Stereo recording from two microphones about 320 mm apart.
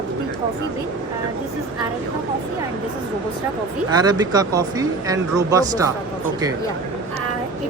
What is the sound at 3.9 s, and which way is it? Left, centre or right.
Speech, centre.